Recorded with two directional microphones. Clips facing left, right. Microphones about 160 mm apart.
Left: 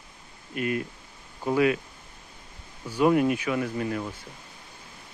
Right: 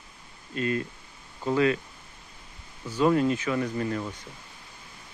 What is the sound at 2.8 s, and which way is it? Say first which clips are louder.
Speech: left 1 dB; 10° left (ahead or behind).